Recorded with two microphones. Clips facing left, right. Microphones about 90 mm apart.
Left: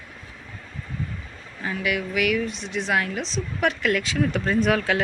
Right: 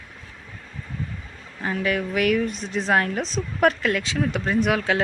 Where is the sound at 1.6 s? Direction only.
35° right (ahead or behind); by 5.0 s 15° right (ahead or behind).